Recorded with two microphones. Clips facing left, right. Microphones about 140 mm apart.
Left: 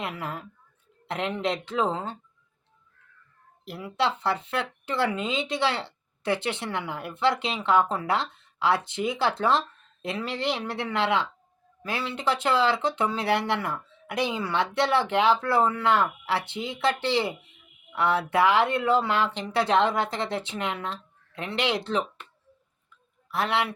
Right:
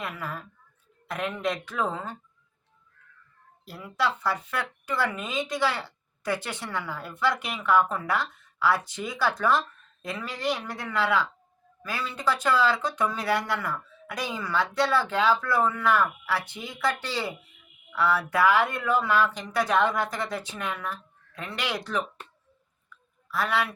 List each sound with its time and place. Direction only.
0.0 s speech: 25° left (ahead or behind)
3.7 s speech: 25° left (ahead or behind)
22.9 s a sound: 25° left (ahead or behind)